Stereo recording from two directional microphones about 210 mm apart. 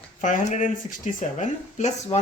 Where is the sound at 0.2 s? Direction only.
35° left (ahead or behind).